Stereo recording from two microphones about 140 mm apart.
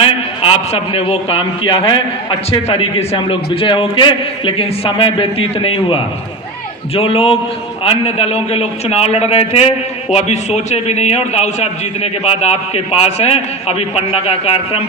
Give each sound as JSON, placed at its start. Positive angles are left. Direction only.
{"t": 0.0, "sound": "a man's voice", "side_deg": 40}